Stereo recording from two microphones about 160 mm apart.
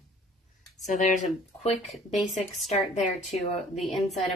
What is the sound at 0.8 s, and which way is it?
Speech, 50° left (ahead or behind).